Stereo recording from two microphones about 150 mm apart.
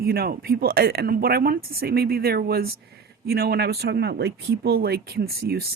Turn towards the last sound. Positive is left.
turn(degrees=-90)